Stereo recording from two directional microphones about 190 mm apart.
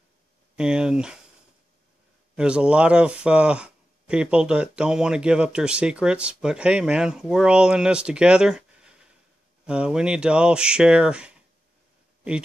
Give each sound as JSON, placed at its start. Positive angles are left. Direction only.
{"t": 0.6, "sound": "speech", "side_deg": -5}
{"t": 2.3, "sound": "speech", "side_deg": -5}